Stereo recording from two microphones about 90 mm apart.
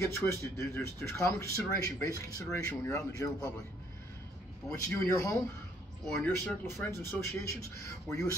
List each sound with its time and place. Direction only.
0.0 s speech: 30° left (ahead or behind)
4.7 s speech: 35° left (ahead or behind)